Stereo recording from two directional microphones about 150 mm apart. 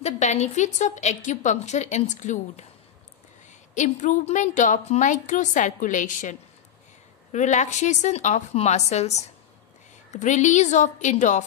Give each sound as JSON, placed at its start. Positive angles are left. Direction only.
{"t": 0.0, "sound": "a woman's voice", "side_deg": 50}
{"t": 3.7, "sound": "a woman's voice", "side_deg": 55}
{"t": 7.3, "sound": "a woman's voice", "side_deg": 50}